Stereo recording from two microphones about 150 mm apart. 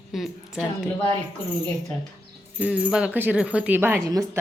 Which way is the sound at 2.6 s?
5° right (ahead or behind).